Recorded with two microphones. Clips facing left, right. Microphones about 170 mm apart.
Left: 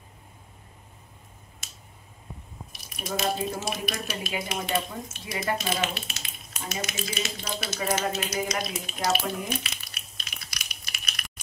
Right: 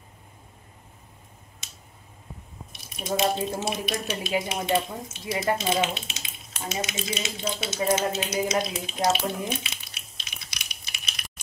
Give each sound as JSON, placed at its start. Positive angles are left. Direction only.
{"t": 2.7, "sound": "speech", "side_deg": -25}